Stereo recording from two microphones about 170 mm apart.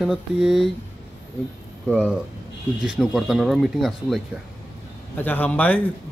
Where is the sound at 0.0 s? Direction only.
Centre (ahead or behind).